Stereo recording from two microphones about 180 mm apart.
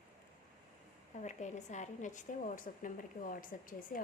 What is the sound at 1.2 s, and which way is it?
A woman's voice, 40° left (ahead or behind).